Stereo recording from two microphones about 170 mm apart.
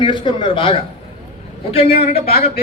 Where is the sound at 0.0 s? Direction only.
30° left (ahead or behind).